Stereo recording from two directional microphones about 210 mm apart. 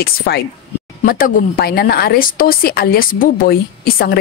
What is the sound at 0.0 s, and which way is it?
A woman's voice, 45° left (ahead or behind).